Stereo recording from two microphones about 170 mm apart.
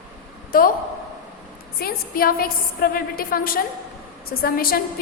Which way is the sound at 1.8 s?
60° left (ahead or behind).